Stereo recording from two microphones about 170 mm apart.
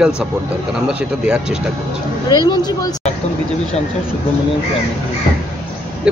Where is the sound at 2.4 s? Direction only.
25° left (ahead or behind).